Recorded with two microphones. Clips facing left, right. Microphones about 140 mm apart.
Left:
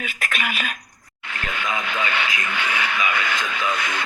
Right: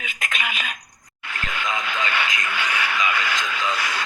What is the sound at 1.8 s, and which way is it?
Radio, 50° left (ahead or behind).